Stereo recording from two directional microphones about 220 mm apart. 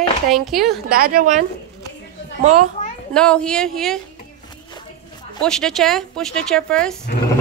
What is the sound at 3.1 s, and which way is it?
Speech, 5° left (ahead or behind).